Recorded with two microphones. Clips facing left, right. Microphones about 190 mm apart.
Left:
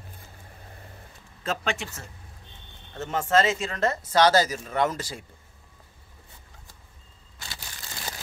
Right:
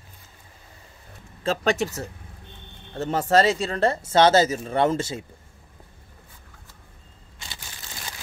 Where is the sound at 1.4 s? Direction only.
35° right (ahead or behind).